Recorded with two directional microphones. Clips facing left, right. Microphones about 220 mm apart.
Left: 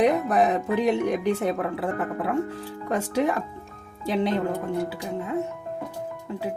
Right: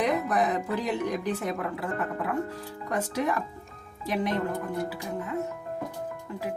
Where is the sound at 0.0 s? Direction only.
25° left (ahead or behind).